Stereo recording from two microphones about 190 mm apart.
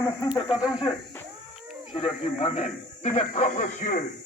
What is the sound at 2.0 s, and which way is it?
A man's voice, 30° left (ahead or behind).